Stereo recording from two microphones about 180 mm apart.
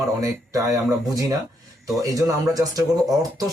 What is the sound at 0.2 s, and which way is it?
Speech, 20° right (ahead or behind).